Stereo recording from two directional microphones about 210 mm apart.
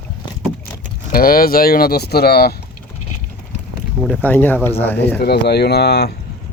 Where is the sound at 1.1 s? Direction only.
45° left (ahead or behind).